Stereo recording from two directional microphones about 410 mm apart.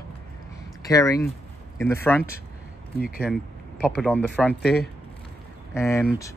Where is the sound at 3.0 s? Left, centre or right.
Left.